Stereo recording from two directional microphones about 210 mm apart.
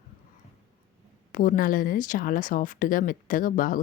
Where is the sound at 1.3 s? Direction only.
40° left (ahead or behind).